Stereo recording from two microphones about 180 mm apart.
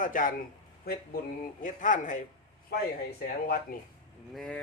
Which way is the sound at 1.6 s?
45° left (ahead or behind).